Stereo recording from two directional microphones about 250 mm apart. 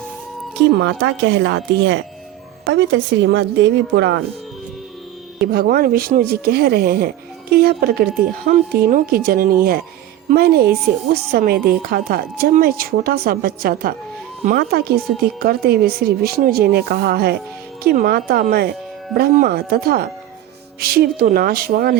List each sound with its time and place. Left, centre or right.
0.8 s speech: right
5.4 s a woman's voice: right